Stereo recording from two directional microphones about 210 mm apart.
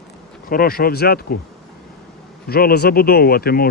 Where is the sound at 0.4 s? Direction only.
45° left (ahead or behind).